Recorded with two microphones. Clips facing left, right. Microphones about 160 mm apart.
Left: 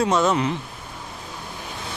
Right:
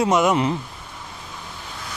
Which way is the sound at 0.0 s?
20° right (ahead or behind).